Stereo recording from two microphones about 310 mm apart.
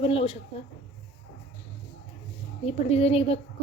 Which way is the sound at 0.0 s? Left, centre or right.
Centre.